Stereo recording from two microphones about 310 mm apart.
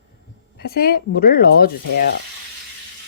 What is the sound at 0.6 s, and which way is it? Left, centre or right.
Speech, left.